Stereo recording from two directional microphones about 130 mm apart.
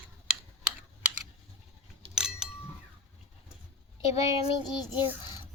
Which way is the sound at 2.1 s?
5° right (ahead or behind).